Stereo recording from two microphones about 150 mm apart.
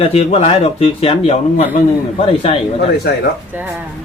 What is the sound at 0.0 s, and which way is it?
Speech, 40° left (ahead or behind).